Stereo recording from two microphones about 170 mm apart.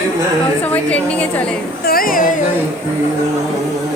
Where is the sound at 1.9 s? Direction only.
60° left (ahead or behind).